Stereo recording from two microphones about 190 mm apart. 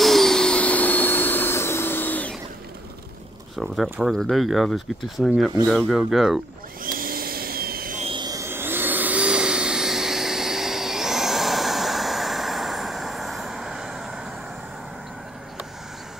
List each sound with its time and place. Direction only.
0.0 s vacuum cleaner: centre (ahead or behind)
3.5 s speech: centre (ahead or behind)
6.8 s a sound: 50° right (ahead or behind)
8.0 s vehicle: 25° right (ahead or behind); by 14.3 s 5° right (ahead or behind)